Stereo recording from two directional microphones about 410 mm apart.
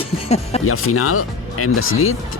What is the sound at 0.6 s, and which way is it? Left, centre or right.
Speech, left.